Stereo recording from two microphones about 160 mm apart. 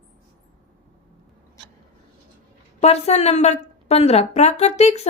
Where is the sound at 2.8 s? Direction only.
40° left (ahead or behind).